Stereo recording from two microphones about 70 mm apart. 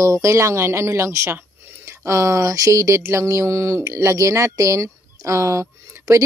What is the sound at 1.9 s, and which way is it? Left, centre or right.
Mantra, right.